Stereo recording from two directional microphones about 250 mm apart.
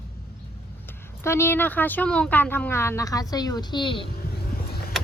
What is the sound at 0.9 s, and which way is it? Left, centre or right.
Speech, centre.